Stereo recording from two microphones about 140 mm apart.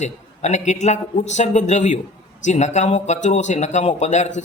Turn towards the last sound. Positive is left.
turn(degrees=55)  # may be behind; listen again after turning